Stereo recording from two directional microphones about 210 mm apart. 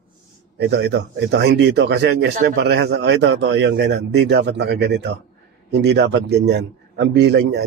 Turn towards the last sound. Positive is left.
turn(degrees=-55)  # may be behind; listen again after turning